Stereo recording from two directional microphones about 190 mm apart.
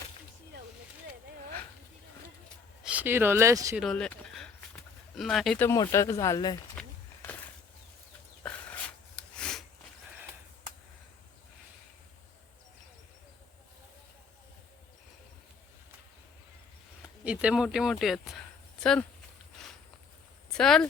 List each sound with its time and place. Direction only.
2.8 s speech: 10° right (ahead or behind)
3.8 s speech: 5° left (ahead or behind)
5.6 s speech: 15° left (ahead or behind)
6.7 s walk: 10° left (ahead or behind)
8.4 s a sound: 5° left (ahead or behind)
17.2 s speech: 5° right (ahead or behind)
20.5 s speech: 5° left (ahead or behind)